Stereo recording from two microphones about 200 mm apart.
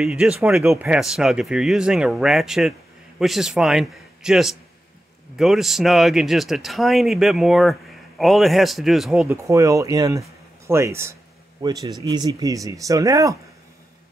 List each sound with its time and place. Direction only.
0.0 s speech: 5° right (ahead or behind)
9.3 s speech: 15° right (ahead or behind)